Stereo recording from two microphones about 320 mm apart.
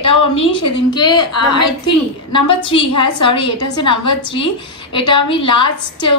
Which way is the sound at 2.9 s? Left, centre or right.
Left.